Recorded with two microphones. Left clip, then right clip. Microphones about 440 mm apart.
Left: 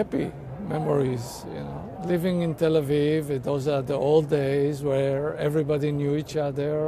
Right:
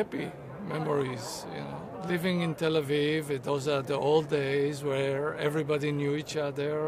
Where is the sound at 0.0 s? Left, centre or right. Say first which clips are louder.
Left 5 dB; left.